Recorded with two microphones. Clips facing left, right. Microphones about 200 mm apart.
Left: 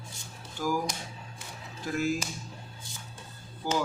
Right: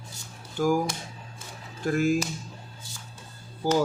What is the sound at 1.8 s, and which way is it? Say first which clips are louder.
Speech: right 6 dB; 50° right (ahead or behind).